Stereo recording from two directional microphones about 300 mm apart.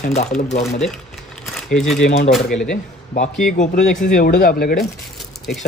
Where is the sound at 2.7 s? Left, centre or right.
Left.